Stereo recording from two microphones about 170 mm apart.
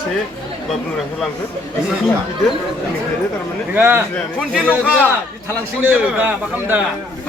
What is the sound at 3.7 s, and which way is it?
Speech, 10° right (ahead or behind).